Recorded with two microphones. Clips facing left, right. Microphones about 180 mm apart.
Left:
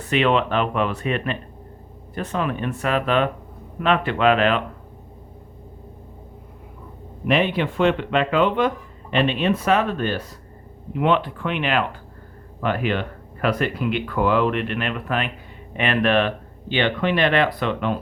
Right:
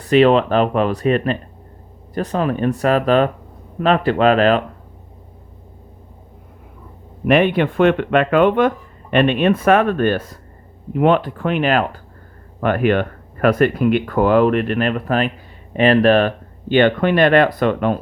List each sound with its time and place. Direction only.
0.0 s speech: 40° right (ahead or behind)
7.3 s speech: 55° right (ahead or behind)
12.5 s speech: 55° right (ahead or behind)